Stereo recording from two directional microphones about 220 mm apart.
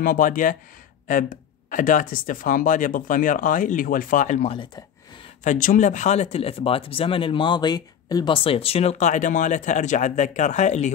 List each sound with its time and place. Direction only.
0.0 s speech: 40° left (ahead or behind)
5.4 s speech: 35° left (ahead or behind)